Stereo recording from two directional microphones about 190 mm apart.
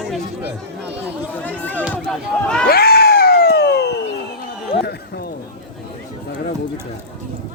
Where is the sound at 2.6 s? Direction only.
55° left (ahead or behind).